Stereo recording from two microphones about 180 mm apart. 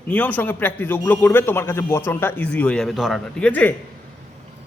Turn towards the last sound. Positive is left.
turn(degrees=10)  # may be behind; listen again after turning